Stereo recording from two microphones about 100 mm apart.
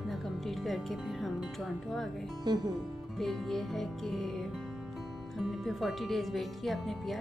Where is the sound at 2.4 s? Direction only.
45° right (ahead or behind).